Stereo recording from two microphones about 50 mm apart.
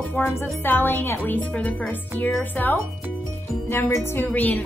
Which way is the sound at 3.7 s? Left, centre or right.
Left.